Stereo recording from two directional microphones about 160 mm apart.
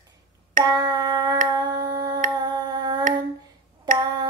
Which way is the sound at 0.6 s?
25° right (ahead or behind).